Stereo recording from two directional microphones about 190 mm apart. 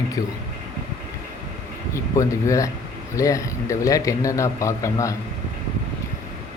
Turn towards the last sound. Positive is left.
turn(degrees=15)  # may be behind; listen again after turning